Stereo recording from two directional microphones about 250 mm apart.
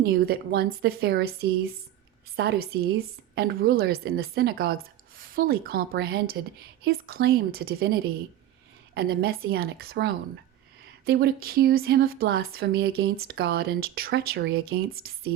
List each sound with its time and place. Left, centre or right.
0.1 s speech: right